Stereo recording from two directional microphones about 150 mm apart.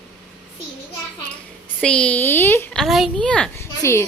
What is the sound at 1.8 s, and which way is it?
Speech, 5° left (ahead or behind).